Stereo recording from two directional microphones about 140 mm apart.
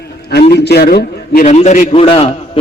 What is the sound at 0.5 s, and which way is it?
Speech, 90° left.